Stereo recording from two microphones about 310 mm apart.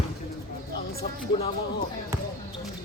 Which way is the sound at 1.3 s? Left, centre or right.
Centre.